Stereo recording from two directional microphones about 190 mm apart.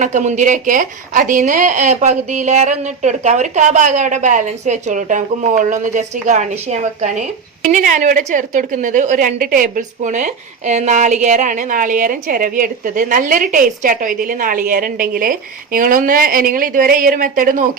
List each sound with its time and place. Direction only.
0.0 s a woman's voice: 40° right (ahead or behind)